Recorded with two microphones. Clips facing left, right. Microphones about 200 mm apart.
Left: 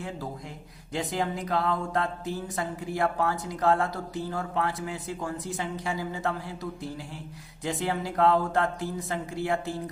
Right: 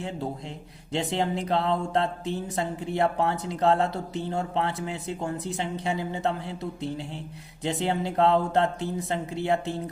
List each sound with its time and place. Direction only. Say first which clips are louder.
0.9 s speech: right 3 dB; 25° right (ahead or behind)